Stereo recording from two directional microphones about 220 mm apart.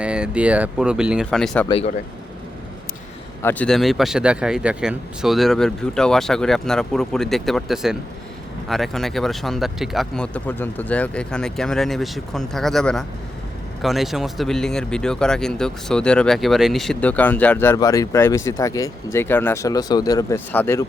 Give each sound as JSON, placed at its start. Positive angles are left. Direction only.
{"t": 0.0, "sound": "speech", "side_deg": -5}
{"t": 1.6, "sound": "speech", "side_deg": 25}
{"t": 3.4, "sound": "speech", "side_deg": 5}